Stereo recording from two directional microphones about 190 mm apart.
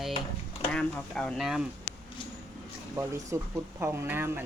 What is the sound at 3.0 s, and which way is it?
Speech, 15° right (ahead or behind).